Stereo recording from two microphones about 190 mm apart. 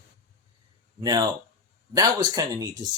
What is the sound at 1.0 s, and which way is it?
Speech, 20° right (ahead or behind).